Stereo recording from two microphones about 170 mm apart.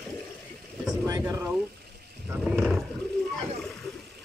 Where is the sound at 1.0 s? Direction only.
25° right (ahead or behind).